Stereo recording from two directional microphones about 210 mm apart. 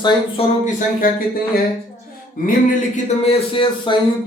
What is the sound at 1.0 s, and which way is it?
Speech, 40° left (ahead or behind).